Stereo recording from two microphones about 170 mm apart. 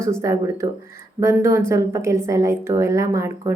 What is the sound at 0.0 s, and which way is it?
A woman's voice, 15° right (ahead or behind).